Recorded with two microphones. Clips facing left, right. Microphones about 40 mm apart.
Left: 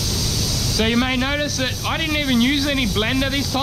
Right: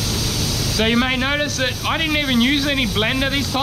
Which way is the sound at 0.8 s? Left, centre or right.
Centre.